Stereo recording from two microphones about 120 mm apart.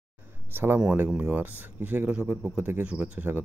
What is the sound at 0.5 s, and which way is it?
Speech, 15° right (ahead or behind).